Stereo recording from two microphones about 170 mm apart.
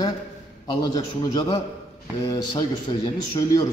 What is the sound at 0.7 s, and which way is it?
A man's voice, 25° left (ahead or behind).